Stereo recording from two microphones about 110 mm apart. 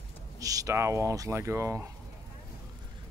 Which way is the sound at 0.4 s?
30° right (ahead or behind).